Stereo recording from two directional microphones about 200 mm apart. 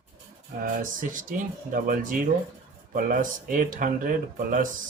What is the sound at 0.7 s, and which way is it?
Speech, 40° right (ahead or behind).